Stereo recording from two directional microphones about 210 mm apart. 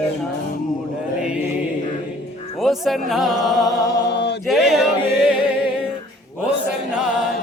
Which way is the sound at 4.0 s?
55° left (ahead or behind).